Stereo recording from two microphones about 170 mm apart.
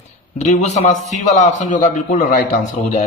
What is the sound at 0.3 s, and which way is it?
A man's voice, 45° left (ahead or behind).